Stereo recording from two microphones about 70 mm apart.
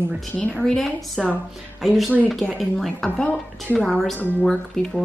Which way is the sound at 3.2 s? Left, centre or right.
Centre.